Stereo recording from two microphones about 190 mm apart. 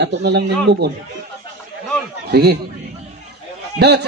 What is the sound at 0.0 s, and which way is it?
Speech, 65° right (ahead or behind).